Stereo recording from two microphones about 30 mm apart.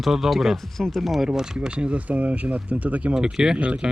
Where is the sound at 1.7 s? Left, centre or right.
Right.